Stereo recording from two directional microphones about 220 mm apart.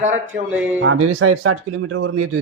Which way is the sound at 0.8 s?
70° right (ahead or behind).